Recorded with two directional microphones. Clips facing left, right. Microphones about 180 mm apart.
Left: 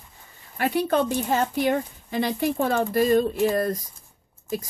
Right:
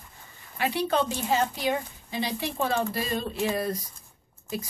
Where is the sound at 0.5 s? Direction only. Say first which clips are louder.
Left 4 dB; 50° left (ahead or behind).